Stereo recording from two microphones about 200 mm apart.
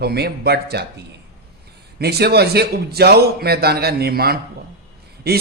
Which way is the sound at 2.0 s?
55° right (ahead or behind).